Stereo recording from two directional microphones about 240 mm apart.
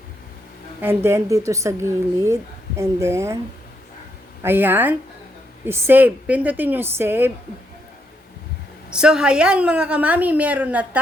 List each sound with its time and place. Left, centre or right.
0.8 s a woman's voice: centre
4.4 s a woman's voice: centre
8.9 s a woman's voice: centre